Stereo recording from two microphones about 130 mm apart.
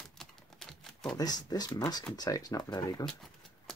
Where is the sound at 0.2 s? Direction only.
5° left (ahead or behind).